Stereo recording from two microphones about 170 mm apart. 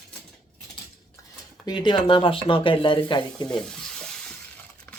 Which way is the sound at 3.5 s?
5° left (ahead or behind).